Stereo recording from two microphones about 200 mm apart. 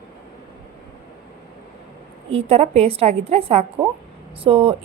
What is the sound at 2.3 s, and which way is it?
A woman's voice, 30° right (ahead or behind).